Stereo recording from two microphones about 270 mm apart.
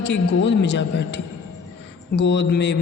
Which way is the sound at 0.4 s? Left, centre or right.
Left.